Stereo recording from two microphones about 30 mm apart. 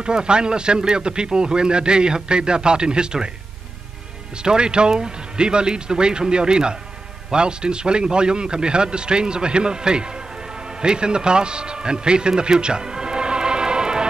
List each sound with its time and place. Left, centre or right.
0.0 s speech: right
4.4 s a man's voice: right